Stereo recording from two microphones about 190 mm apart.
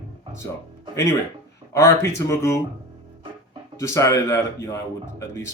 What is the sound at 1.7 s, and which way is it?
Speech, 15° left (ahead or behind).